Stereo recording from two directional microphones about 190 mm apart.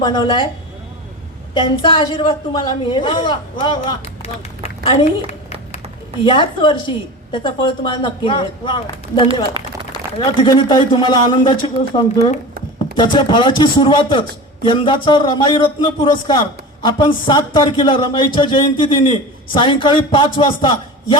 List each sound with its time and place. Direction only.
0.0 s speech: 25° left (ahead or behind)
1.5 s speech: 25° left (ahead or behind)
5.7 s speech: 25° left (ahead or behind)
13.0 s speech: 25° left (ahead or behind)